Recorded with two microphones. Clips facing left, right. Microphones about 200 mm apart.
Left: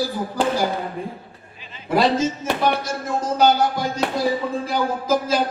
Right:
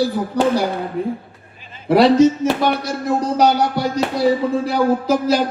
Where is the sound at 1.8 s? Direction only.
70° right (ahead or behind).